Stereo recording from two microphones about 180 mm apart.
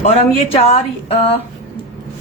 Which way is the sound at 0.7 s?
35° left (ahead or behind).